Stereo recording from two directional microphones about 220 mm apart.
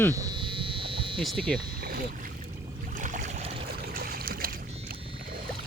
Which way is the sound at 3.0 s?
35° right (ahead or behind).